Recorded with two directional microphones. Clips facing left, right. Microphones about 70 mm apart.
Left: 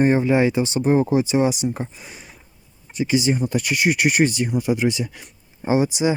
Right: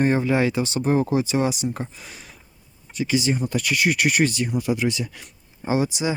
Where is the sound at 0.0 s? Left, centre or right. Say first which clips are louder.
Left 3 dB; centre.